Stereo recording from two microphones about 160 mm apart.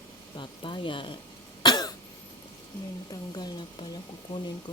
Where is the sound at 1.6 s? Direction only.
25° left (ahead or behind).